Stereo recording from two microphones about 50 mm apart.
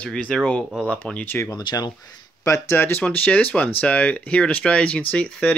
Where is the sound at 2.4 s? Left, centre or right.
Left.